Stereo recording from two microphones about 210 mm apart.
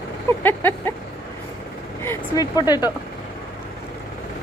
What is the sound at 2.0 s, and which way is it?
Speech, 15° left (ahead or behind).